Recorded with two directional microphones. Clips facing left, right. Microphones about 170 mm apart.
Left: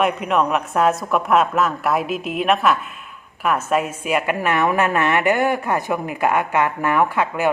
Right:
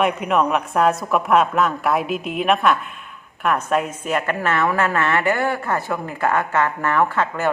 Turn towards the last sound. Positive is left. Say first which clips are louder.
# left 1 dB
turn(degrees=10)  # may be behind; listen again after turning